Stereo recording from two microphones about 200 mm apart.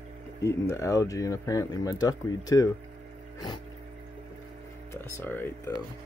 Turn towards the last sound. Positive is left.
turn(degrees=10)  # may be behind; listen again after turning